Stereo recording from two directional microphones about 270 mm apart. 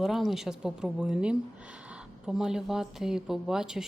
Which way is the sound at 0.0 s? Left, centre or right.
Centre.